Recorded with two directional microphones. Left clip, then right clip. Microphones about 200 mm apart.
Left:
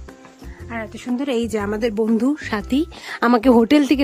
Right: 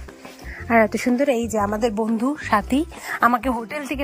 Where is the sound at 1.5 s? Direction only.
20° left (ahead or behind).